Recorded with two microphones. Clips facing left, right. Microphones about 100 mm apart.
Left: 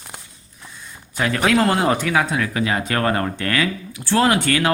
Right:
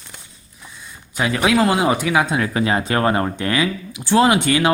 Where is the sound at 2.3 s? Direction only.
30° right (ahead or behind).